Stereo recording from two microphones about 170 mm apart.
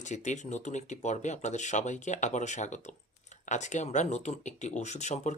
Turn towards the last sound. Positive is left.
turn(degrees=45)  # may be behind; listen again after turning